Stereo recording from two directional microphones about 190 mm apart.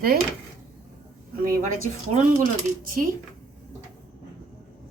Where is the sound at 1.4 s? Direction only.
45° right (ahead or behind).